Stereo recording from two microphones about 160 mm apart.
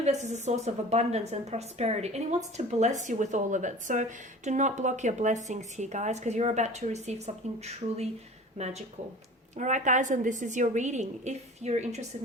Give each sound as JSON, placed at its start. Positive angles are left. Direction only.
{"t": 0.0, "sound": "speech", "side_deg": -45}